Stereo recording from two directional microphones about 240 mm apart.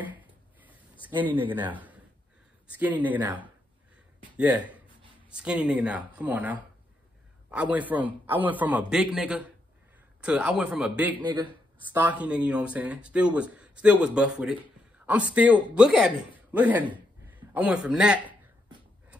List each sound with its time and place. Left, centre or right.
0.0 s a sound: centre
1.5 s speech: centre
11.2 s speech: centre
12.0 s speech: centre